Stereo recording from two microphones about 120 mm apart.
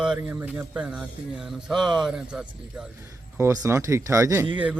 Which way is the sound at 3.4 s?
25° right (ahead or behind).